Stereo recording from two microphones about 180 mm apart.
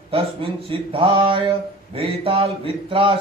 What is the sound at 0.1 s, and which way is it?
Speech, 30° right (ahead or behind).